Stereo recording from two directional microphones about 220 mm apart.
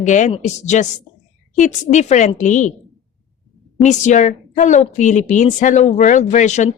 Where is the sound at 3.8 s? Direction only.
35° left (ahead or behind).